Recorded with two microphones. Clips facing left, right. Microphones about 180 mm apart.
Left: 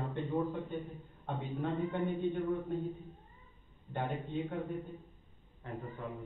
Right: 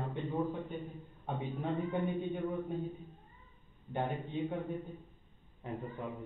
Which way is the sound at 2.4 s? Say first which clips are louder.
Left 2 dB; centre (ahead or behind).